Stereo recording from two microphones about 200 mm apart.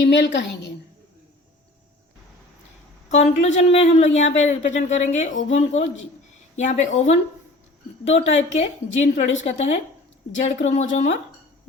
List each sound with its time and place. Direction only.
0.1 s a woman's voice: 60° left (ahead or behind)
3.1 s speech: 35° left (ahead or behind)